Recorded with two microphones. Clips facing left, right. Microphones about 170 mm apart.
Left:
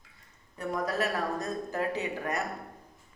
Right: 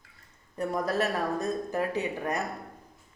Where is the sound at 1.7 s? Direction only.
15° right (ahead or behind).